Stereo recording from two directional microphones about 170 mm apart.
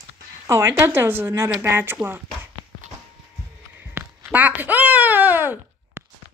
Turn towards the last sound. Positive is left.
turn(degrees=-10)  # may be behind; listen again after turning